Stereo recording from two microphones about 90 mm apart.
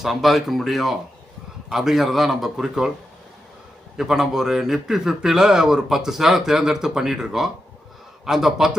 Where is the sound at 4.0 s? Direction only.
5° right (ahead or behind).